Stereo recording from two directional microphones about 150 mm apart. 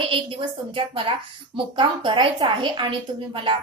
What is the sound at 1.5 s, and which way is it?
A woman's voice, 35° right (ahead or behind).